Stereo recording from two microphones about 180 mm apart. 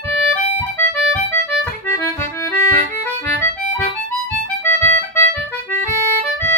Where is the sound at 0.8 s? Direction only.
15° left (ahead or behind).